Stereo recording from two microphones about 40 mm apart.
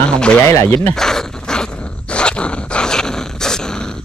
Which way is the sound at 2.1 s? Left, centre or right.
Left.